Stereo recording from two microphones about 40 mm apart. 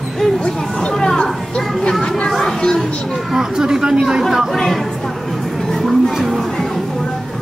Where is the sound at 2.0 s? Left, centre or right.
Left.